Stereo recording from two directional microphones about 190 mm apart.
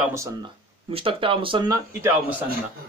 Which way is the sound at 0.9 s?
30° right (ahead or behind).